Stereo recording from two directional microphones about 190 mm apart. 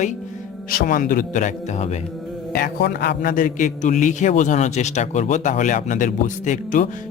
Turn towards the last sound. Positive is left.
turn(degrees=40)  # may be behind; listen again after turning